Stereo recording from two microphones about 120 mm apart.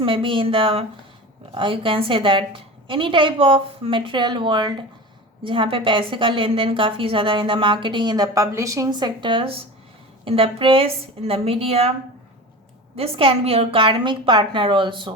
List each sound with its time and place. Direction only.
0.0 s a woman's voice: 45° right (ahead or behind)
13.0 s a woman's voice: 50° right (ahead or behind)